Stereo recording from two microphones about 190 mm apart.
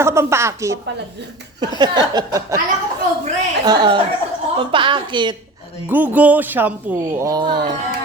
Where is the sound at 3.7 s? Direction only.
25° right (ahead or behind).